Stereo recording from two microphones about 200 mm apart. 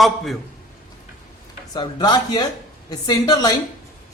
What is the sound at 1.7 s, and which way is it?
Speech, 20° left (ahead or behind).